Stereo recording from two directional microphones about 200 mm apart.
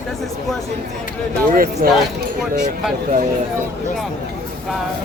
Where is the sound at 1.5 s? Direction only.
45° right (ahead or behind).